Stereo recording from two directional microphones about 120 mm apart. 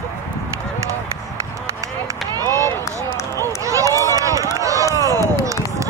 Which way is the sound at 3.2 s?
20° left (ahead or behind).